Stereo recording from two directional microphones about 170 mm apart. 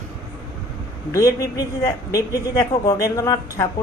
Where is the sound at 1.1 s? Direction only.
20° left (ahead or behind).